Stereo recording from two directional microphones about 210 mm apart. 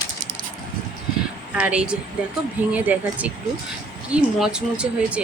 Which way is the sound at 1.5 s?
5° right (ahead or behind).